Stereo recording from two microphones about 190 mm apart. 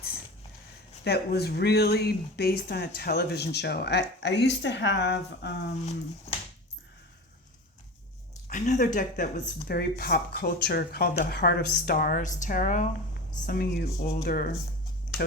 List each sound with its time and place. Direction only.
1.0 s speech: 55° left (ahead or behind)
8.4 s speech: 40° left (ahead or behind)